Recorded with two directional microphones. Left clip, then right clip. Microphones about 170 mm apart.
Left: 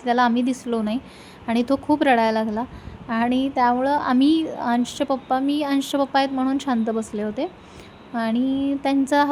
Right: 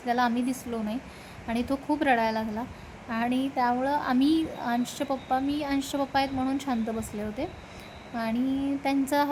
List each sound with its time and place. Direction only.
0.0 s a woman's voice: 15° left (ahead or behind)